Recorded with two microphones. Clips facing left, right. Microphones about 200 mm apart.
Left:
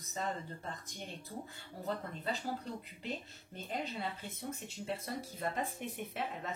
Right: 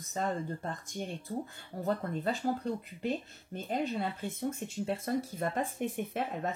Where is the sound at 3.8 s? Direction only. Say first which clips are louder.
Right 7 dB; 50° right (ahead or behind).